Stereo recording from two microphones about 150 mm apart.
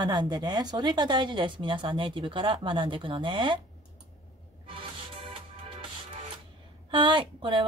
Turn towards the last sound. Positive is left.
turn(degrees=-30)  # may be behind; listen again after turning